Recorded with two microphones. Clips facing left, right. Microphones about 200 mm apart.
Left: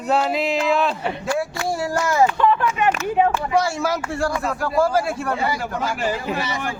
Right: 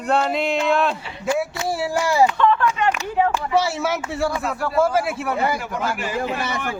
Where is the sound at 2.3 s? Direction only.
15° left (ahead or behind).